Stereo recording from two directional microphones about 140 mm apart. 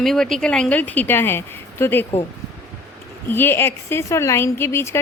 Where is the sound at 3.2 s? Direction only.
15° left (ahead or behind).